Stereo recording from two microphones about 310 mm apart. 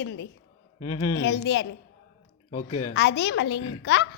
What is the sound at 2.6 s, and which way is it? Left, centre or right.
Speech, left.